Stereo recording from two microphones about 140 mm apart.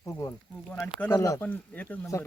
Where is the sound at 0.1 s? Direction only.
25° left (ahead or behind).